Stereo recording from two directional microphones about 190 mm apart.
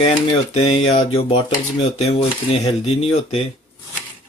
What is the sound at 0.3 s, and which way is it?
Speech, 30° left (ahead or behind).